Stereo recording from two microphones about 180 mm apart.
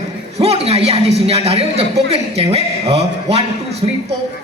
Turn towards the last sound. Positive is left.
turn(degrees=-35)  # may be behind; listen again after turning